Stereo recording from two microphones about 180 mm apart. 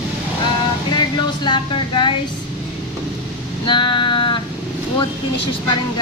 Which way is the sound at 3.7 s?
25° left (ahead or behind).